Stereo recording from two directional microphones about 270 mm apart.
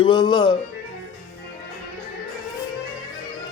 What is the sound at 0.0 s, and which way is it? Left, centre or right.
Speech, centre.